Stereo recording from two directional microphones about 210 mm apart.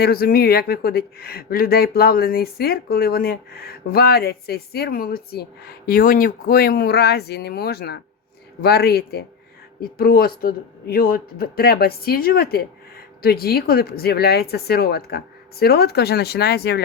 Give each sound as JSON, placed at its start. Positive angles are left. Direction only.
{"t": 0.0, "sound": "speech", "side_deg": 45}